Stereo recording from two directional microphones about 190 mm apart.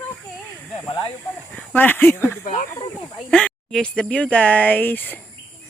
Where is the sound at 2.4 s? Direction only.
40° left (ahead or behind).